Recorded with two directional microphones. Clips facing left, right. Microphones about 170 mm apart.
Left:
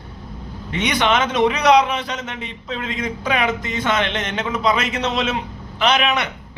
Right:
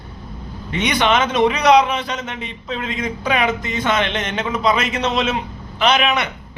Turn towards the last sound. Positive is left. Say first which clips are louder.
# right 1 dB
turn(degrees=-10)  # may be behind; listen again after turning